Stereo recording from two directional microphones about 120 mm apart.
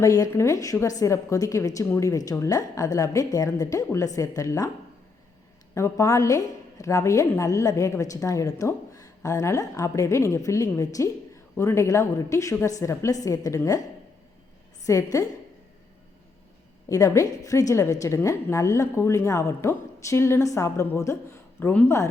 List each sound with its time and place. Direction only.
0.0 s a woman's voice: 25° left (ahead or behind)
5.7 s a woman's voice: 25° left (ahead or behind)
14.8 s a woman's voice: 25° left (ahead or behind)
16.9 s a woman's voice: 30° left (ahead or behind)